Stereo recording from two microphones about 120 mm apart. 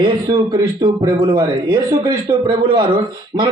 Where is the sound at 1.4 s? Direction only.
25° right (ahead or behind).